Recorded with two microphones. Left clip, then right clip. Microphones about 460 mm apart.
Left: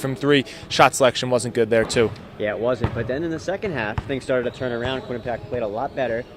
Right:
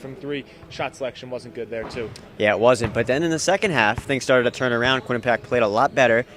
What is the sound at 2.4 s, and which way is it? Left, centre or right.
Speech, right.